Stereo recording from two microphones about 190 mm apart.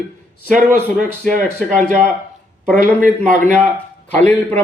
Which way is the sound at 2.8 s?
40° right (ahead or behind).